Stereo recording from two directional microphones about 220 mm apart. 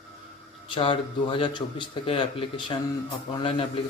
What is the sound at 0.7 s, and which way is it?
Speech, 25° left (ahead or behind).